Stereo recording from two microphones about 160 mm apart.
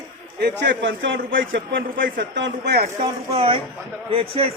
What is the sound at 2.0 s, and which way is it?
Speech, 75° right (ahead or behind).